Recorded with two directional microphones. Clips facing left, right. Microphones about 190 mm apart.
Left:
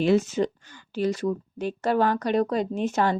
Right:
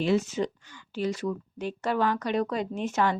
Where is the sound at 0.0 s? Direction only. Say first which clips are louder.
Left 4 dB; 50° left (ahead or behind).